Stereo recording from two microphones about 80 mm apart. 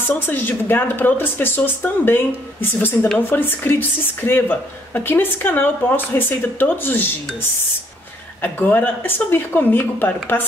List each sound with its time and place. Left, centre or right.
0.3 s speech: left
8.4 s speech: left